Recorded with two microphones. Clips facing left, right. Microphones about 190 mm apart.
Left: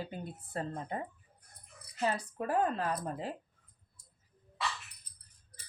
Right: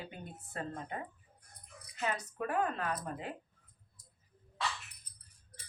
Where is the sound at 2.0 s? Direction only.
30° left (ahead or behind).